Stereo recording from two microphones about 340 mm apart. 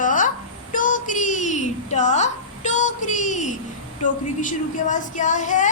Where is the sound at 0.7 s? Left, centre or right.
Left.